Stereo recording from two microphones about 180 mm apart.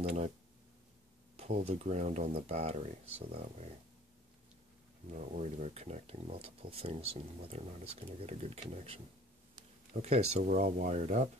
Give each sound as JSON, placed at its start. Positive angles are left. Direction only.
{"t": 1.3, "sound": "speech", "side_deg": -35}
{"t": 5.1, "sound": "speech", "side_deg": -40}
{"t": 10.0, "sound": "speech", "side_deg": -35}